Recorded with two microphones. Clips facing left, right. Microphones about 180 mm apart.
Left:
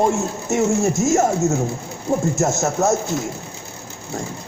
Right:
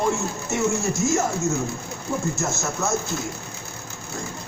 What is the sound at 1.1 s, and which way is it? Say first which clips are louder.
Speech: left 6 dB; 45° left (ahead or behind).